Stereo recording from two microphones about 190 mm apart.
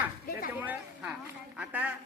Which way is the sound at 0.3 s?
50° left (ahead or behind).